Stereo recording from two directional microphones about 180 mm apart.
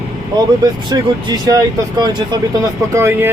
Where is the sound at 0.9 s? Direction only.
20° right (ahead or behind).